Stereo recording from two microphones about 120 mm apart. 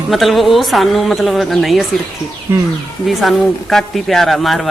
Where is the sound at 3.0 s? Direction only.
Centre (ahead or behind).